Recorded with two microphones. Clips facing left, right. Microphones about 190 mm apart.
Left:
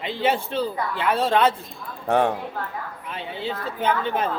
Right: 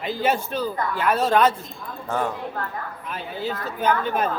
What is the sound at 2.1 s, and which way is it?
Speech, 65° left (ahead or behind).